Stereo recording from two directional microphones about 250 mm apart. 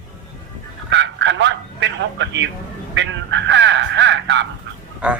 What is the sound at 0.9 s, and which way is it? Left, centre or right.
Quack, right.